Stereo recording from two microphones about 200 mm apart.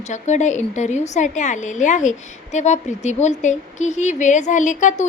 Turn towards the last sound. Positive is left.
turn(degrees=40)  # may be behind; listen again after turning